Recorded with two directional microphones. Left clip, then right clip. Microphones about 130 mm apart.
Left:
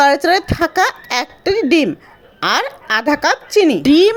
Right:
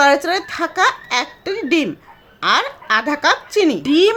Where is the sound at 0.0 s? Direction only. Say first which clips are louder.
Left 2 dB; 40° left (ahead or behind).